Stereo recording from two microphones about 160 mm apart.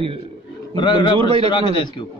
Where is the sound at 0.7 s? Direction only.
30° left (ahead or behind).